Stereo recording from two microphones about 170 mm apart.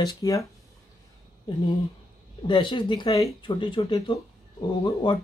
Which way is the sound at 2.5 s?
30° left (ahead or behind).